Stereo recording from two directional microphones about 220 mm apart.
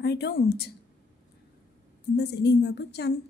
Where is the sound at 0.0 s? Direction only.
50° left (ahead or behind).